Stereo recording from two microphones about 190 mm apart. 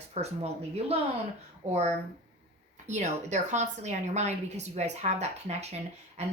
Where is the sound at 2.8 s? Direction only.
40° right (ahead or behind).